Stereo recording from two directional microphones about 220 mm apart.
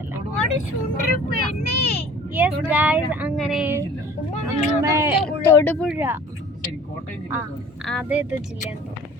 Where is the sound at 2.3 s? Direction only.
10° right (ahead or behind).